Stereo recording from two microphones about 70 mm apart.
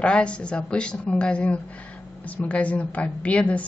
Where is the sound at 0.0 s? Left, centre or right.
Centre.